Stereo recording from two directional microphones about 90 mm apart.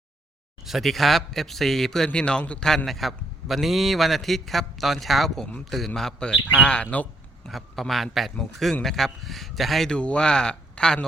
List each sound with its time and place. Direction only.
0.6 s a man's voice: centre (ahead or behind); by 7.1 s 20° left (ahead or behind)
7.4 s a man's voice: centre (ahead or behind)